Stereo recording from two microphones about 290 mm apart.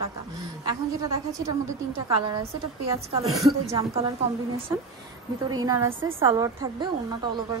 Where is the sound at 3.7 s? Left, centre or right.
Centre.